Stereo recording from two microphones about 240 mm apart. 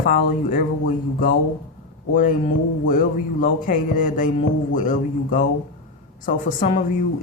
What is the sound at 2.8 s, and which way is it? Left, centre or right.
Speech, left.